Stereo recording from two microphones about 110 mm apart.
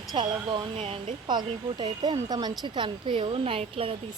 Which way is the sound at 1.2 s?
45° right (ahead or behind).